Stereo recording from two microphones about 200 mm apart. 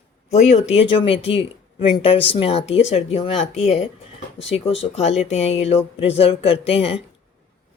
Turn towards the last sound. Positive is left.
turn(degrees=30)  # may be behind; listen again after turning